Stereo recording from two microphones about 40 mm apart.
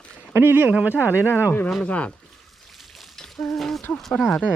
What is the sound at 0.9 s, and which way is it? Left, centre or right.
Speech, left.